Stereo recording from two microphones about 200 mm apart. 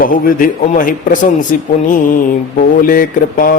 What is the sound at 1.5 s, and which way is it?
Mantra, 40° left (ahead or behind).